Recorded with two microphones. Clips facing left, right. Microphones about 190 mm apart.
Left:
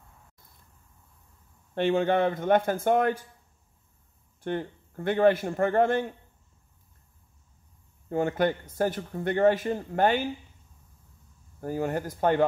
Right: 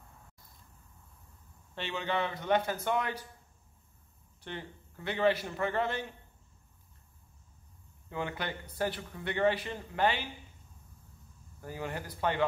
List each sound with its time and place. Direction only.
1.8 s speech: 50° left (ahead or behind)
4.4 s speech: 50° left (ahead or behind)
8.1 s speech: 45° left (ahead or behind)
11.6 s speech: 45° left (ahead or behind)